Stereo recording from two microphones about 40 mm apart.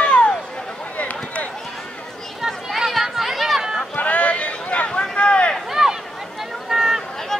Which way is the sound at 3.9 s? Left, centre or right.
Left.